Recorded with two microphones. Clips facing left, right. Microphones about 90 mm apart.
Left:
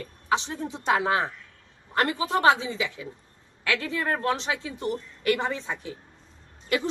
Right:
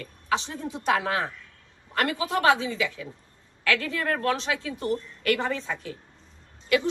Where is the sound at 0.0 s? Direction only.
25° left (ahead or behind).